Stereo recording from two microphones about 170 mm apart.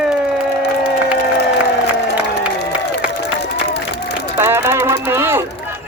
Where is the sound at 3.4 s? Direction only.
85° left.